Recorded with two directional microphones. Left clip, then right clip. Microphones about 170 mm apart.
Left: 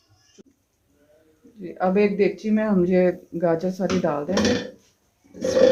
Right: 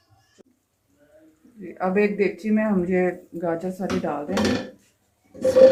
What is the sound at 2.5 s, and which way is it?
Speech, 60° left (ahead or behind).